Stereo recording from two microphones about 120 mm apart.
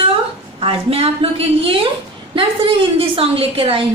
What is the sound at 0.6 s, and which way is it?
A woman's voice, 50° right (ahead or behind).